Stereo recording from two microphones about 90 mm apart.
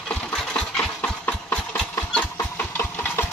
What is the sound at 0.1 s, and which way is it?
Engine, 15° left (ahead or behind).